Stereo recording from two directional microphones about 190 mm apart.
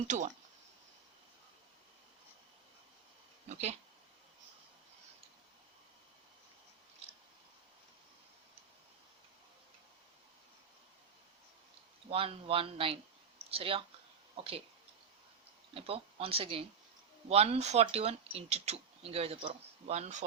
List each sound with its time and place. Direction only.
3.5 s speech: 35° right (ahead or behind)
12.1 s speech: 30° right (ahead or behind)
15.7 s speech: 30° right (ahead or behind)